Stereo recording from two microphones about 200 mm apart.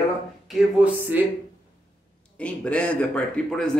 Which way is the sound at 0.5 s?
5° right (ahead or behind).